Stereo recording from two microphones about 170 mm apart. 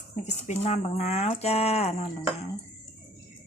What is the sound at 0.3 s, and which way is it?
Speech, 40° left (ahead or behind).